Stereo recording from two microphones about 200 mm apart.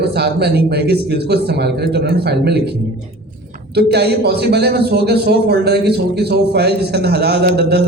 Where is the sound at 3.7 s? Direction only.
55° right (ahead or behind).